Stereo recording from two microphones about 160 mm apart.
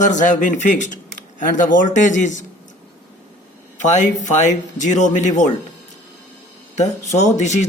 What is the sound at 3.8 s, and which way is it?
Speech, 50° left (ahead or behind).